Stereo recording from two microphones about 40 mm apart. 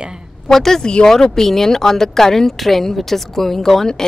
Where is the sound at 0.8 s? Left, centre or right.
Left.